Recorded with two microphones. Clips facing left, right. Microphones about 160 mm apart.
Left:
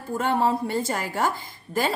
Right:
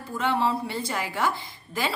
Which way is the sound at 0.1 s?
45° left (ahead or behind).